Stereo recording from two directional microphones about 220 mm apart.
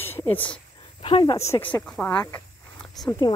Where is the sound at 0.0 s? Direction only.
10° left (ahead or behind).